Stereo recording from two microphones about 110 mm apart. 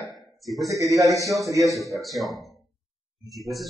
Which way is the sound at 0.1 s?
Centre (ahead or behind).